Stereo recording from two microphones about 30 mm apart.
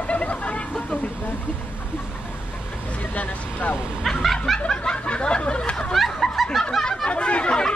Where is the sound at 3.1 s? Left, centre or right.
Left.